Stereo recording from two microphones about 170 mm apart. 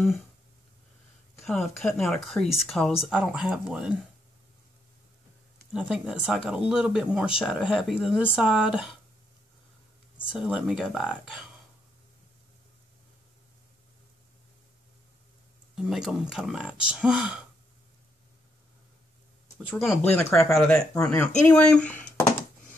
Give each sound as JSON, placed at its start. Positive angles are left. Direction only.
{"t": 1.4, "sound": "speech", "side_deg": 0}
{"t": 5.7, "sound": "speech", "side_deg": -5}
{"t": 10.1, "sound": "speech", "side_deg": -5}
{"t": 15.7, "sound": "speech", "side_deg": -5}
{"t": 19.7, "sound": "speech", "side_deg": 0}
{"t": 20.0, "sound": "speech", "side_deg": 10}
{"t": 20.9, "sound": "speech", "side_deg": 15}